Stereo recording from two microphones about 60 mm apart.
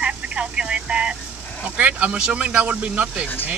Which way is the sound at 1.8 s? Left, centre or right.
Right.